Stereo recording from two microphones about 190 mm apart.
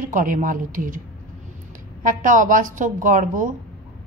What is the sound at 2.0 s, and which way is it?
A woman's voice, 45° right (ahead or behind).